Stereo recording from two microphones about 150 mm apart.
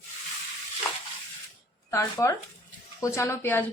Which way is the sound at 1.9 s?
20° left (ahead or behind).